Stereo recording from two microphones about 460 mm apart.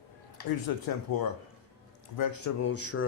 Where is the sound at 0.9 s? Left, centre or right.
Left.